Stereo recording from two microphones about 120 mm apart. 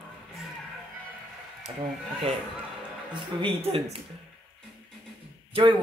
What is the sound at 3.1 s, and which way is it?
Speech, 50° right (ahead or behind).